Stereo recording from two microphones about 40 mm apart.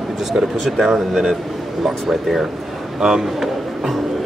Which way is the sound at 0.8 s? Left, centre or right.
Centre.